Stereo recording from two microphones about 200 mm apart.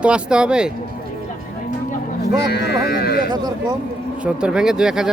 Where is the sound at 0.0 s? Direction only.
5° right (ahead or behind).